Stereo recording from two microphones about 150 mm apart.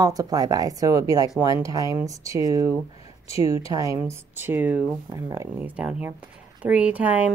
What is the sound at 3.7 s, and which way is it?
Speech, 20° right (ahead or behind).